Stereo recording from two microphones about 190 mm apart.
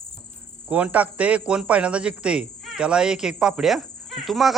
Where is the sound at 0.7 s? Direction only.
10° right (ahead or behind).